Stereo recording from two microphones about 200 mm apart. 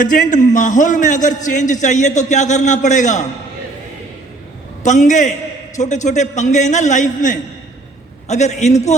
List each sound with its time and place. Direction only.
0.0 s a man's voice: 40° left (ahead or behind)
4.8 s a man's voice: 35° left (ahead or behind)